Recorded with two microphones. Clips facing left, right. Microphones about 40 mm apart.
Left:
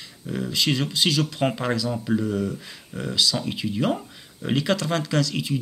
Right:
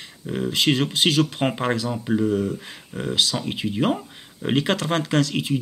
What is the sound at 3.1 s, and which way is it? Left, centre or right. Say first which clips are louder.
Speech: right 1 dB; right.